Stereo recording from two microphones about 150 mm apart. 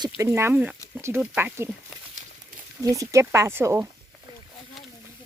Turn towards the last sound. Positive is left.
turn(degrees=-15)  # may be behind; listen again after turning